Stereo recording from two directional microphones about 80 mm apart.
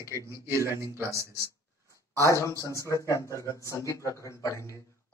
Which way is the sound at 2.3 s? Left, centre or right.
Left.